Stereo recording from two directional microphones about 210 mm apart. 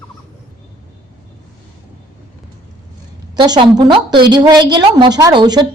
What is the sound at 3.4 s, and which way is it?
A woman's voice, 20° right (ahead or behind).